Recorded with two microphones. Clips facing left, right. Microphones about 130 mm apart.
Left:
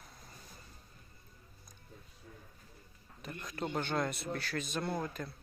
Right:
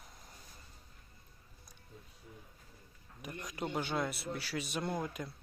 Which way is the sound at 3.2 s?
15° right (ahead or behind).